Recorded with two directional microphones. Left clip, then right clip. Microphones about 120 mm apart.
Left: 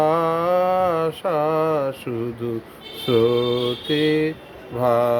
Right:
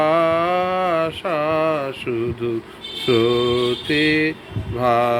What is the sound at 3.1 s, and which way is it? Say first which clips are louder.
Mantra: right 1 dB; 25° left (ahead or behind).